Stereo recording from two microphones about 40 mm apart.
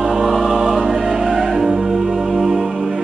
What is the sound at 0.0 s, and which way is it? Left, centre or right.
Music, centre.